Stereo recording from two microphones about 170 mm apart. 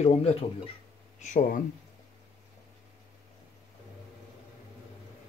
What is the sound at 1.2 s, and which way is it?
Speech, 50° left (ahead or behind).